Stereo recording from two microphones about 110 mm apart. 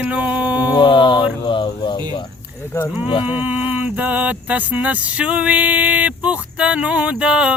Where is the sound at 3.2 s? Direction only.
15° right (ahead or behind).